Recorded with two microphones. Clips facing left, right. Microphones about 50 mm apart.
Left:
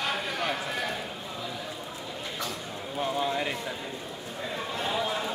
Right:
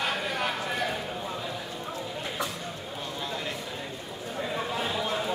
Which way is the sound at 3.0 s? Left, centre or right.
Left.